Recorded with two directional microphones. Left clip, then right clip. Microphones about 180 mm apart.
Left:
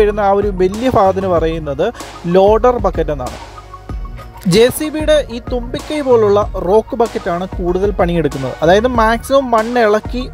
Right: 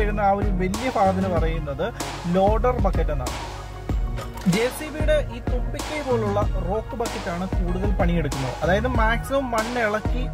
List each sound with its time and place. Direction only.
0.0 s speech: 45° left (ahead or behind)
4.5 s speech: 40° left (ahead or behind)
8.3 s speech: centre (ahead or behind)
8.6 s speech: 45° left (ahead or behind)